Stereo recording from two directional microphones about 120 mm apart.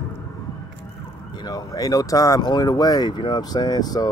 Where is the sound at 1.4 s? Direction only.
30° left (ahead or behind).